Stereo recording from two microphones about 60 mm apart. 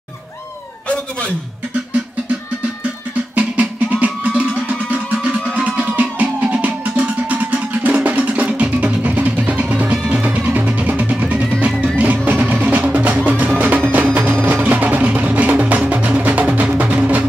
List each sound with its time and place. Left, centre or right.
3.3 s music: right
14.5 s music: right